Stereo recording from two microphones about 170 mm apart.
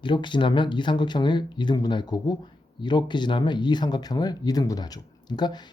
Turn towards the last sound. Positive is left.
turn(degrees=25)  # may be behind; listen again after turning